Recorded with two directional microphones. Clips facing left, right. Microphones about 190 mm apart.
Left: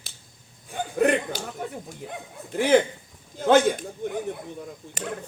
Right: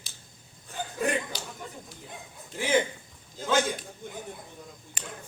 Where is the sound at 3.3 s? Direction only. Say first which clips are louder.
Left 8 dB; 60° left (ahead or behind).